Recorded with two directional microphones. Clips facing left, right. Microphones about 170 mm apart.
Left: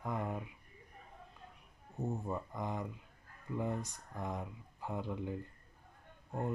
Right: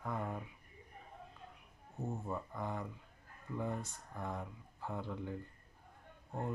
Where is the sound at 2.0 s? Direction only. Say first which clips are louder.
Left 2 dB; 15° left (ahead or behind).